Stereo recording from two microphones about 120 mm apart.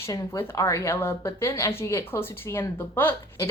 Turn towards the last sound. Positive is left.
turn(degrees=20)  # may be behind; listen again after turning